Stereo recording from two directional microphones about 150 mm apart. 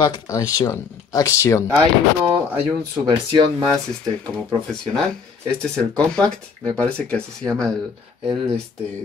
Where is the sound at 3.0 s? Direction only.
30° right (ahead or behind).